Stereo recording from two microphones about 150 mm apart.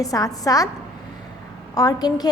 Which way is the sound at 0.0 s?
25° left (ahead or behind).